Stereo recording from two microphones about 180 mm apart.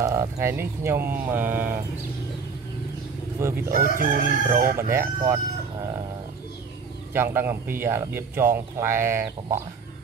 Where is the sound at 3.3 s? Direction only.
15° right (ahead or behind).